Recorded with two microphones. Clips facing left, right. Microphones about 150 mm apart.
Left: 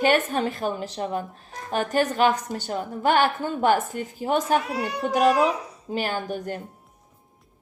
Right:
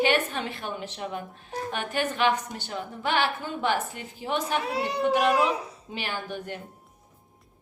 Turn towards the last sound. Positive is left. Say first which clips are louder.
# left 5 dB
turn(degrees=40)  # may be behind; listen again after turning